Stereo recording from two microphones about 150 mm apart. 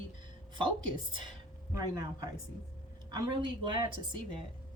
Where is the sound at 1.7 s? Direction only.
25° right (ahead or behind).